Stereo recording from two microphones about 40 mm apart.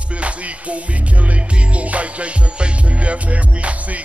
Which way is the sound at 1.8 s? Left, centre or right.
Right.